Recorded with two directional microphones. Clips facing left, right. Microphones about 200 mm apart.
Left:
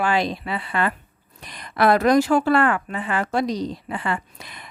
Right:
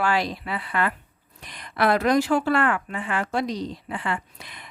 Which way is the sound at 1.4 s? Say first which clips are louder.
Left 3 dB; 40° left (ahead or behind).